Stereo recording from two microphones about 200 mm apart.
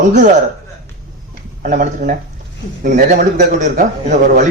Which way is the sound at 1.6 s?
40° right (ahead or behind).